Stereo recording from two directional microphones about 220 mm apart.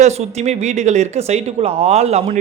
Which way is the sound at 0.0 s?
30° right (ahead or behind).